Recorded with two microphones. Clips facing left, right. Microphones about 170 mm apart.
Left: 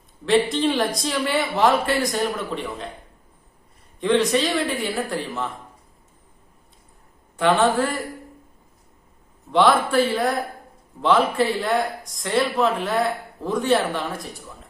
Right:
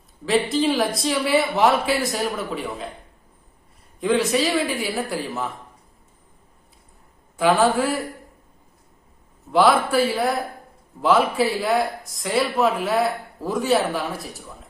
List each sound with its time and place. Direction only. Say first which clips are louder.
0.3 s speech: left 1 dB; centre (ahead or behind)
4.0 s speech: left 1 dB; 5° right (ahead or behind)
7.3 s speech: even; 5° right (ahead or behind)
9.5 s a man's voice: right 1 dB; 5° right (ahead or behind)